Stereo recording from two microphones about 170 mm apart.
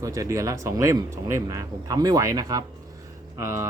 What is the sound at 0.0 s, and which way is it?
Speech, 20° right (ahead or behind).